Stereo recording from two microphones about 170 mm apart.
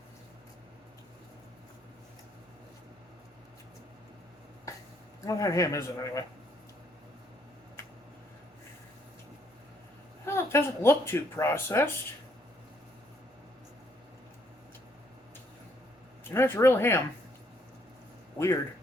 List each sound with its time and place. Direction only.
5.2 s a man's voice: 20° left (ahead or behind)
10.2 s speech: 15° left (ahead or behind)
16.3 s speech: 15° left (ahead or behind)
18.3 s speech: 15° left (ahead or behind)